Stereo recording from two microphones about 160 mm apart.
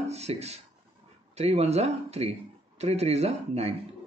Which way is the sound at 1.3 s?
40° right (ahead or behind).